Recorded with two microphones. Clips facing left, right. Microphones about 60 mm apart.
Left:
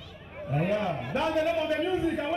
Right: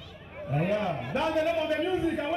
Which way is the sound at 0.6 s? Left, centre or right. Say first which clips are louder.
Even; right.